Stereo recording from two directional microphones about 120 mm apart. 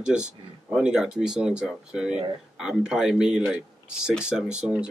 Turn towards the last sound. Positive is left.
turn(degrees=-10)  # may be behind; listen again after turning